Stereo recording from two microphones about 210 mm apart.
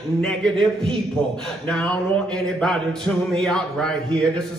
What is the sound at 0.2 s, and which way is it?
Speech, 5° left (ahead or behind).